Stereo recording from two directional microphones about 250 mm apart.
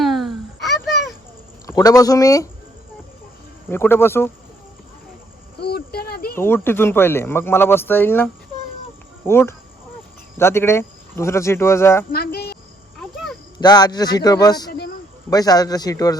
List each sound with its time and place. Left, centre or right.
0.0 s a sound: centre
1.6 s speech: centre
3.7 s a man's voice: centre
5.5 s a sound: left
6.3 s a man's voice: centre
12.1 s speech: left
13.6 s a man's voice: centre
14.7 s speech: left
15.3 s a man's voice: centre